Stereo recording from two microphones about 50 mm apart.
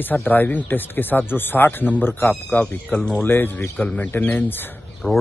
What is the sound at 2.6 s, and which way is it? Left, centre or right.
Speech, centre.